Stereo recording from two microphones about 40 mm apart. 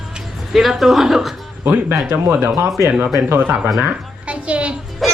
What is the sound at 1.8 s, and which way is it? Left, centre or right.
Speech, right.